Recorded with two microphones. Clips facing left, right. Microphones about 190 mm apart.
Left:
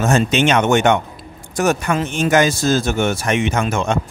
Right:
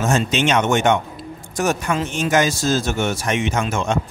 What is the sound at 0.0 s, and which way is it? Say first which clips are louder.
Speech: left 3 dB; 60° left (ahead or behind).